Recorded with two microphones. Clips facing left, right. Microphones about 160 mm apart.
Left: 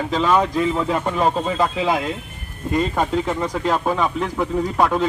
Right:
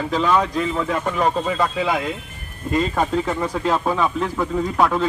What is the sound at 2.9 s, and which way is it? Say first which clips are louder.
Speech: even; 5° left (ahead or behind).